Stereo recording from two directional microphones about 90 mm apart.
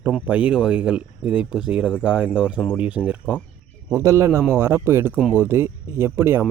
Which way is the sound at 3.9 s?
35° right (ahead or behind).